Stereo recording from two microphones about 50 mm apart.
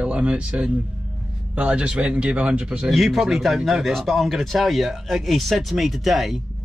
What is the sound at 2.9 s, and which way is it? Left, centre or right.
Speech, centre.